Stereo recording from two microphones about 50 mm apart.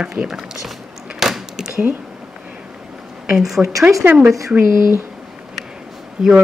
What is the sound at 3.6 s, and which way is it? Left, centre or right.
Speech, centre.